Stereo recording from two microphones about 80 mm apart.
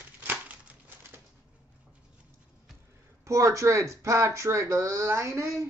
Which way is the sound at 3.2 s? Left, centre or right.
Right.